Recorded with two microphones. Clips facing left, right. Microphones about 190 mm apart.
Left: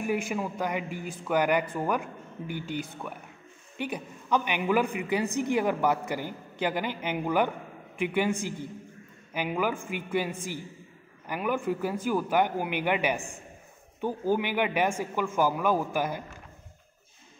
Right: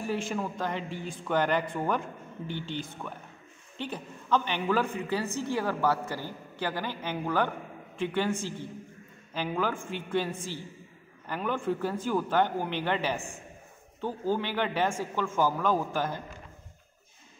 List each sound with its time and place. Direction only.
0.0 s a woman's voice: 10° left (ahead or behind)